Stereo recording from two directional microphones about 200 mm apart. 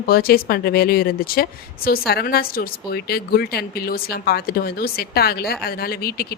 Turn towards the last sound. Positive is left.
turn(degrees=50)  # may be behind; listen again after turning